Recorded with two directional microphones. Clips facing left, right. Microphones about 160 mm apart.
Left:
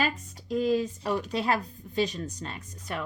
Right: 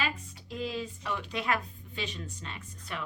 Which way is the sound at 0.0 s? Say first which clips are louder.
Left 5 dB; 45° left (ahead or behind).